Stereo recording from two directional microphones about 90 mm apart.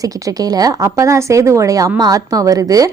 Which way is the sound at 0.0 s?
40° right (ahead or behind).